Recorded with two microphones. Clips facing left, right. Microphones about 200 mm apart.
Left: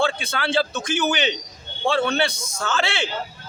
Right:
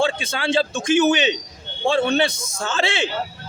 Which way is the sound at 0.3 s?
20° right (ahead or behind).